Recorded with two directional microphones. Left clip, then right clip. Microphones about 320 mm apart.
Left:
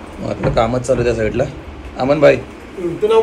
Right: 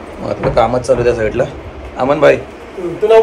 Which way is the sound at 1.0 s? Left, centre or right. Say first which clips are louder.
Right 3 dB; centre.